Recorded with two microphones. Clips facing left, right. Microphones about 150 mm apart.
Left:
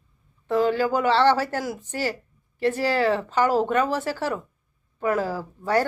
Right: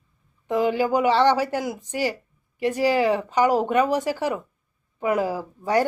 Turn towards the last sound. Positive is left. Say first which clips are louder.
# right 1 dB
turn(degrees=-15)  # may be behind; listen again after turning